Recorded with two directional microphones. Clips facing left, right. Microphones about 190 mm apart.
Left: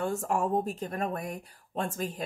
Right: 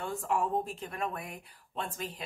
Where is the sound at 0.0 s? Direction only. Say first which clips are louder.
Left 3 dB; 45° left (ahead or behind).